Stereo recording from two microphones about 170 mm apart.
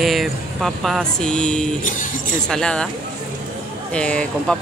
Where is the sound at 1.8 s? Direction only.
50° left (ahead or behind).